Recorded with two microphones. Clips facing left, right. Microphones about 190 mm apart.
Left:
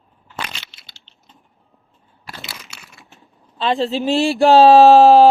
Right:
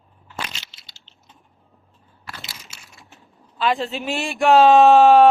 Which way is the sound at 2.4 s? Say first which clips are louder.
Left 5 dB; 65° left (ahead or behind).